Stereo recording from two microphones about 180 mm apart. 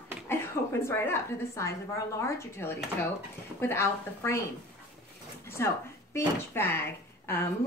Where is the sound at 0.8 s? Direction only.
15° left (ahead or behind).